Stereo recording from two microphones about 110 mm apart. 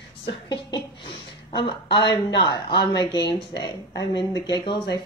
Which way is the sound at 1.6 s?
40° left (ahead or behind).